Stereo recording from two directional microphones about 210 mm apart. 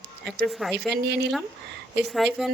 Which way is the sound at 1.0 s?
55° right (ahead or behind).